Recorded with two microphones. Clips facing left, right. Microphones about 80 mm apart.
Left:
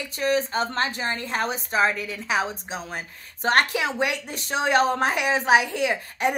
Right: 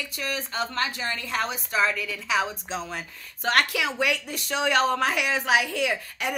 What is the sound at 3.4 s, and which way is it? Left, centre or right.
A woman's voice, left.